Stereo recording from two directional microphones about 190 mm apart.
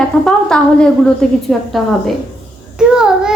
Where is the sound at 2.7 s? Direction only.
5° right (ahead or behind).